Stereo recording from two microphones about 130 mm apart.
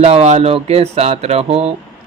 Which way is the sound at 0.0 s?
55° right (ahead or behind).